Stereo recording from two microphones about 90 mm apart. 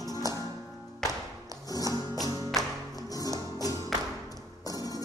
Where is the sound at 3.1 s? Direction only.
45° left (ahead or behind).